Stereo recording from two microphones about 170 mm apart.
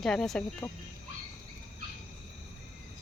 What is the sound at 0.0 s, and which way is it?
Speech, 5° left (ahead or behind).